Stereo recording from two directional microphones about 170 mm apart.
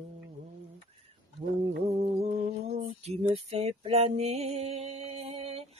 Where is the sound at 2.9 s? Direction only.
40° right (ahead or behind).